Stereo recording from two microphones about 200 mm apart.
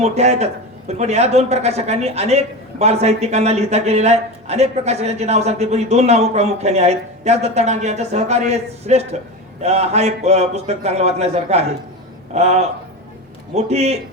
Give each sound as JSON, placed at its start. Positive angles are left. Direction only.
{"t": 0.0, "sound": "a man's voice", "side_deg": -35}